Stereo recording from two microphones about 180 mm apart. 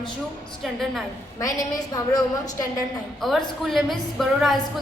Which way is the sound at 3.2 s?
Centre (ahead or behind).